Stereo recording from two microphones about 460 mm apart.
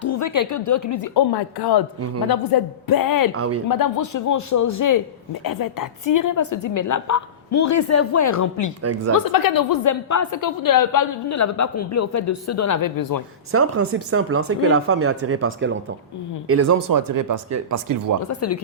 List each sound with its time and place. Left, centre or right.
0.0 s a woman's voice: left
1.1 s a woman's voice: left
3.3 s speech: right
3.7 s a woman's voice: left
8.8 s a woman's voice: right
9.2 s a woman's voice: left
13.5 s speech: right
18.3 s a woman's voice: left